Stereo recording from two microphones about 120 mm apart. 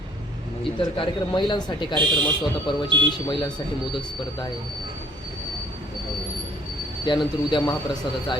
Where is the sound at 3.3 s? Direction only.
40° left (ahead or behind).